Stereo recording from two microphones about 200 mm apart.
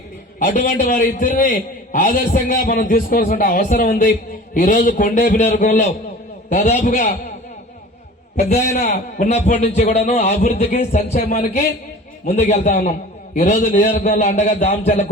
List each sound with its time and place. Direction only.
0.3 s a man's voice: 45° left (ahead or behind)
8.4 s a man's voice: 35° left (ahead or behind)